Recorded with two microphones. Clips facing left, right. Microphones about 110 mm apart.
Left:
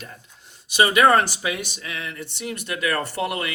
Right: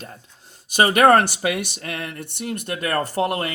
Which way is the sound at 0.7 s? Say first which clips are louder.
Right 2 dB; 50° right (ahead or behind).